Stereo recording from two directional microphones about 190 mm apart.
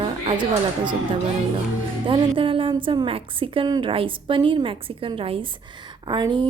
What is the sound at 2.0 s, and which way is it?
A woman's voice, 25° right (ahead or behind).